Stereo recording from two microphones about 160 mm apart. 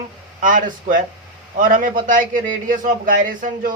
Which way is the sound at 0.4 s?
55° right (ahead or behind).